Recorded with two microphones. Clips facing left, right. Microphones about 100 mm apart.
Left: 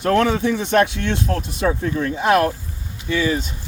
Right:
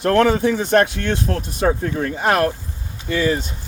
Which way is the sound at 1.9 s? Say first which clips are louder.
Left 1 dB; 45° right (ahead or behind).